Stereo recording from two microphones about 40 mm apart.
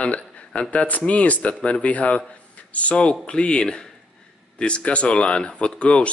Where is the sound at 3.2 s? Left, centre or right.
Left.